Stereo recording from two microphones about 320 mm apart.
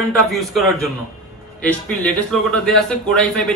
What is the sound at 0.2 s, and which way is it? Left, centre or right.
A man's voice, centre.